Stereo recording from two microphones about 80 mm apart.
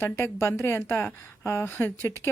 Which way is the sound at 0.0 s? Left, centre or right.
Left.